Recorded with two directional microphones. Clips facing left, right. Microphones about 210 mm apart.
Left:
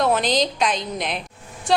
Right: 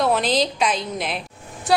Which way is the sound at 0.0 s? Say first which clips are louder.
Even; centre (ahead or behind).